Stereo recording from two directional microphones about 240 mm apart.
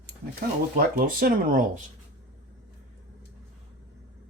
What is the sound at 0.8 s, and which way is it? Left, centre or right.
Speech, right.